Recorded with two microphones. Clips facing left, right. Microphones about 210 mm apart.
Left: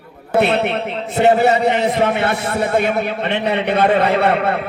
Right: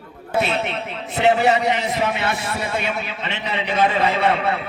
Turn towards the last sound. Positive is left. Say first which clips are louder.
# left 4 dB
turn(degrees=55)  # may be behind; listen again after turning